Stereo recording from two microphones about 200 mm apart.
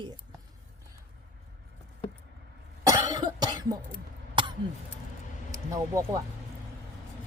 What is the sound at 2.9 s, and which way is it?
Cough, 20° right (ahead or behind).